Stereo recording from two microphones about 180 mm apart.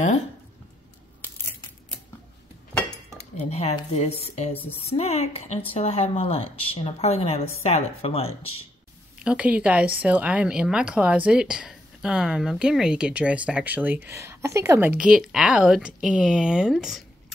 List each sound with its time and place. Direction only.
3.2 s dishes: 35° left (ahead or behind)
4.0 s speech: 35° left (ahead or behind)
9.2 s speech: 5° right (ahead or behind)